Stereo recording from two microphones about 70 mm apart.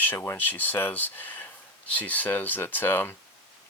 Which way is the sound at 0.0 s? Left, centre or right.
Left.